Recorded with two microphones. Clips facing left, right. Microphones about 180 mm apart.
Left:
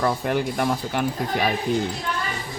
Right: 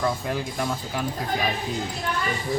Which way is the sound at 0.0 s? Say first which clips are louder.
Left 4 dB; 65° left (ahead or behind).